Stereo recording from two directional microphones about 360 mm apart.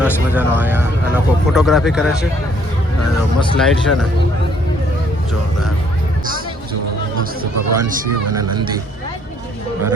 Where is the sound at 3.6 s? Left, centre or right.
Centre.